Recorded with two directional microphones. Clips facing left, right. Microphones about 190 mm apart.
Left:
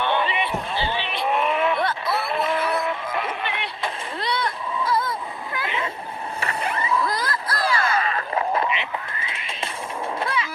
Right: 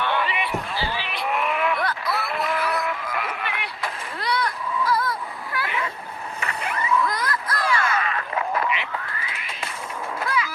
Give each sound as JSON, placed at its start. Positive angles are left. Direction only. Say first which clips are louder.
{"t": 0.0, "sound": "basketball bounce", "louder": "left 2 dB", "side_deg": 25}
{"t": 5.5, "sound": "a sound", "louder": "even", "side_deg": 25}
{"t": 10.2, "sound": "artillery fire", "louder": "right 2 dB", "side_deg": 25}